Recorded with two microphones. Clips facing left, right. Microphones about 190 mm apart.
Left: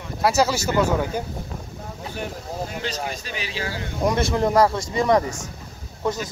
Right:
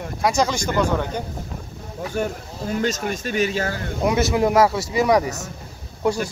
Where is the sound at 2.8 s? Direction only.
45° right (ahead or behind).